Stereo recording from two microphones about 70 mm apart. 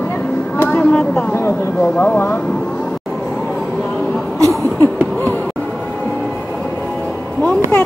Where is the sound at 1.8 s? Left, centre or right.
Left.